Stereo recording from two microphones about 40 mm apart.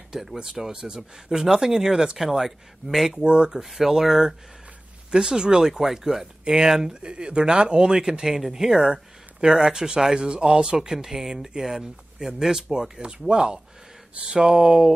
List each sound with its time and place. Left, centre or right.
0.1 s a man's voice: centre
1.1 s speech: centre
3.3 s a man's voice: right
3.5 s speech: centre
5.1 s speech: centre
7.0 s a man's voice: right
14.4 s speech: centre